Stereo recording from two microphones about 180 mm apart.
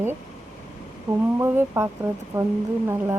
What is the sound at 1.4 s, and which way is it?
Speech, 15° right (ahead or behind).